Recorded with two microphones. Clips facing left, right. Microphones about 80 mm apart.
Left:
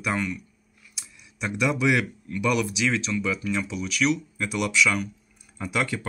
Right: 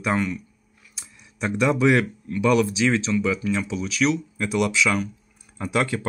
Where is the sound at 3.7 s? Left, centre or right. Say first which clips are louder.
Right 1 dB; right.